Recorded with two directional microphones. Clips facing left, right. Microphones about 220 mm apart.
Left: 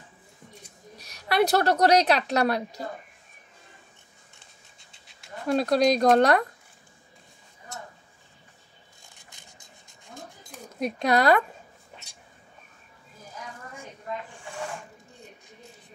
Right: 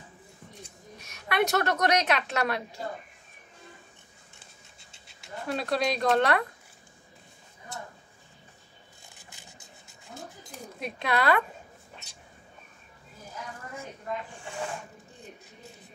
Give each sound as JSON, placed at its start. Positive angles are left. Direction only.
{"t": 0.9, "sound": "a woman's voice", "side_deg": 35}
{"t": 4.7, "sound": "pant", "side_deg": 0}
{"t": 5.5, "sound": "a woman's voice", "side_deg": 40}
{"t": 9.1, "sound": "a sound", "side_deg": -5}
{"t": 10.8, "sound": "a woman's voice", "side_deg": 40}